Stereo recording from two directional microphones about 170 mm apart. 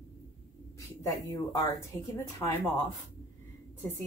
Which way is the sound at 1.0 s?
20° left (ahead or behind).